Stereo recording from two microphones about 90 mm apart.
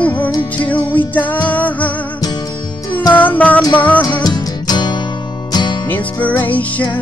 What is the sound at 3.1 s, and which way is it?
Music, 20° left (ahead or behind).